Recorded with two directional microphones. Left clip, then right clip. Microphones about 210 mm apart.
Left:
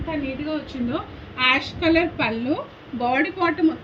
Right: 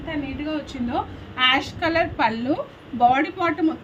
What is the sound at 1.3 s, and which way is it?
A woman's voice, 50° right (ahead or behind).